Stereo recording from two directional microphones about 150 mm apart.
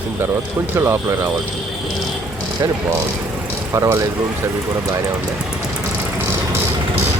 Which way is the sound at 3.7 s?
20° right (ahead or behind).